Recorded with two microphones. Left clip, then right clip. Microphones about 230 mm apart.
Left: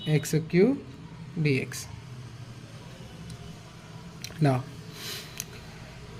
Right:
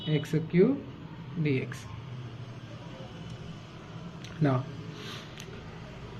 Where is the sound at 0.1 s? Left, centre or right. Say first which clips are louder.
Left 3 dB; left.